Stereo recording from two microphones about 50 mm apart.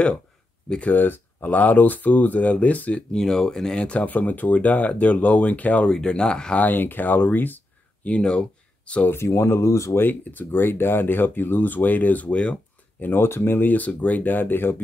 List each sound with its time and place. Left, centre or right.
0.7 s speech: left
0.9 s speech: left
3.1 s speech: centre; by 5.9 s left
5.9 s speech: centre
6.6 s speech: left
8.1 s speech: centre
9.1 s speech: left
9.9 s speech: left
13.0 s speech: left
13.7 s speech: left